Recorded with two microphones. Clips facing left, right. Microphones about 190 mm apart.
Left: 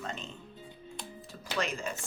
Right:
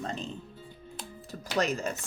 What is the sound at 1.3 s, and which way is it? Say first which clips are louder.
Music: right 5 dB; 40° right (ahead or behind).